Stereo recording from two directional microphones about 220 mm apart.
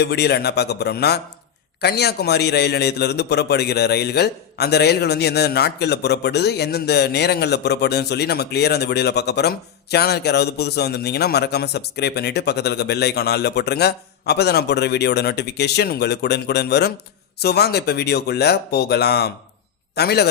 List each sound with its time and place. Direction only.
0.0 s a man's voice: 50° left (ahead or behind)